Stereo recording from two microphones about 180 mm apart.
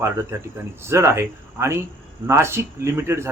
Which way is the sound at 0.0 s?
15° right (ahead or behind).